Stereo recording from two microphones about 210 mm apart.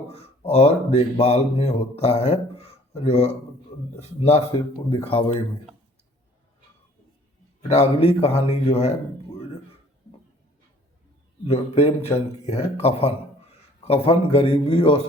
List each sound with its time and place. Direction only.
0.1 s a man's voice: 30° left (ahead or behind)
7.7 s a man's voice: 30° left (ahead or behind)
11.4 s a man's voice: 30° left (ahead or behind)